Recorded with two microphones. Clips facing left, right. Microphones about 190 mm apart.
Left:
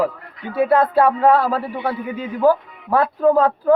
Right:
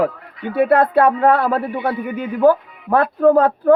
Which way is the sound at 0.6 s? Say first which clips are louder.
Right 2 dB; 60° right (ahead or behind).